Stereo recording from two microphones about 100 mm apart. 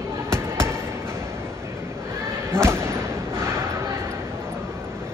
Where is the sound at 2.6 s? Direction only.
5° left (ahead or behind).